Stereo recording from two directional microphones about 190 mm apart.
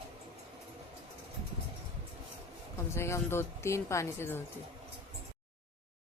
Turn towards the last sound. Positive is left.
turn(degrees=10)  # may be behind; listen again after turning